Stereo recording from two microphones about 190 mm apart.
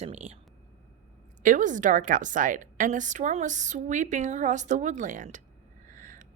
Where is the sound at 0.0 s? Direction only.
35° right (ahead or behind).